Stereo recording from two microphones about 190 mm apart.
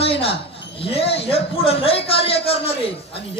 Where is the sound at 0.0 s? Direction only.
30° left (ahead or behind).